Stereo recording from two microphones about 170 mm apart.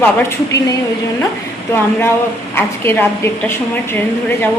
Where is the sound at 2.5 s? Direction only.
15° left (ahead or behind).